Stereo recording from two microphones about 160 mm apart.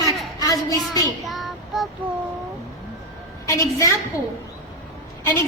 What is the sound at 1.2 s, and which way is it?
Child singing, centre (ahead or behind).